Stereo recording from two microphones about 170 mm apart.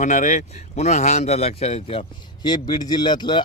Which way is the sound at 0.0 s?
45° left (ahead or behind).